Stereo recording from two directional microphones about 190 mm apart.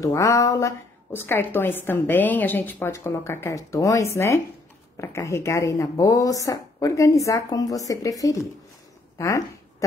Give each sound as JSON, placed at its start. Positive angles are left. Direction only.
{"t": 0.0, "sound": "a woman's voice", "side_deg": 15}